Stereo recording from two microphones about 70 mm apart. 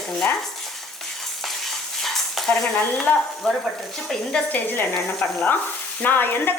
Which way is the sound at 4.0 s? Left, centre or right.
Centre.